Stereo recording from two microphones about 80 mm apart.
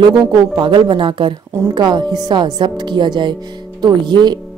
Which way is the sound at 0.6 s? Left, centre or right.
Right.